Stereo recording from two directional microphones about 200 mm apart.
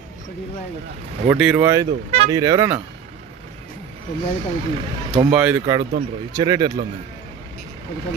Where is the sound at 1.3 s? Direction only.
5° right (ahead or behind).